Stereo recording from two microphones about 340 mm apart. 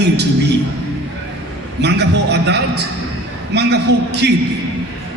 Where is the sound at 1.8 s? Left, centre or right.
Right.